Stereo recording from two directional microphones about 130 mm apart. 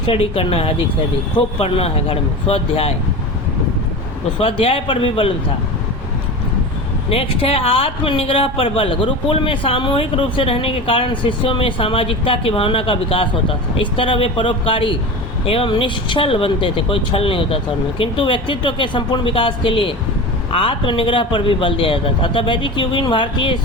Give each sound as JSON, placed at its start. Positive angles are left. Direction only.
{"t": 0.0, "sound": "speech", "side_deg": 45}
{"t": 4.4, "sound": "speech", "side_deg": 45}
{"t": 7.1, "sound": "speech", "side_deg": 45}